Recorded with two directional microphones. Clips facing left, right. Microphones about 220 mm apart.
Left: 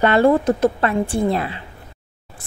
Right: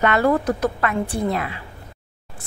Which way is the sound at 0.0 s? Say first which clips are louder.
Left 4 dB; 30° left (ahead or behind).